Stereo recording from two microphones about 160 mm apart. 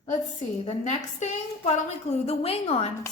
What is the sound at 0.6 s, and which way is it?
Speech, 45° left (ahead or behind).